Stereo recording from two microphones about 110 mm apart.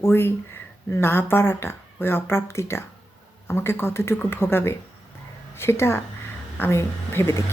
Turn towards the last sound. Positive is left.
turn(degrees=25)  # may be behind; listen again after turning